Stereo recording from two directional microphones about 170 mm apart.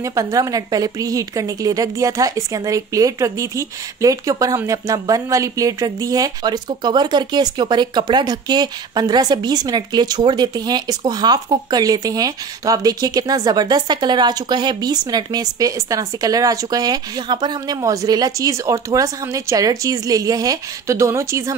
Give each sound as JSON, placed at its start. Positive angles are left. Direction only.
{"t": 0.0, "sound": "a woman's voice", "side_deg": -20}